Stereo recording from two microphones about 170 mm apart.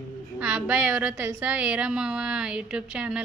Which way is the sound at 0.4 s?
5° right (ahead or behind).